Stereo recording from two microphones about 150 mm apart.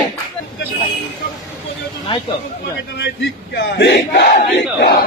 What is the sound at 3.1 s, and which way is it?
Battle cry, 90° left.